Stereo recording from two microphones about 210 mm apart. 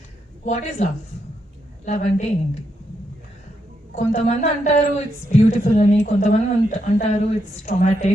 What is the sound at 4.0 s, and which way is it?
A woman's voice, 30° left (ahead or behind).